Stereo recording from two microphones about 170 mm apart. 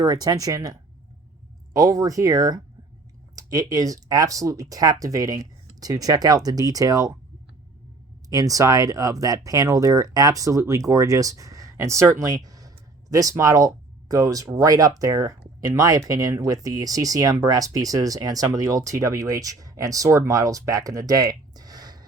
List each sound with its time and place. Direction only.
0.0 s speech: 25° right (ahead or behind)
8.3 s speech: 20° right (ahead or behind)